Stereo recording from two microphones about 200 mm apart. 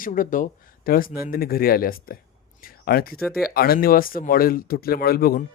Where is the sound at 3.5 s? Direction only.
50° left (ahead or behind).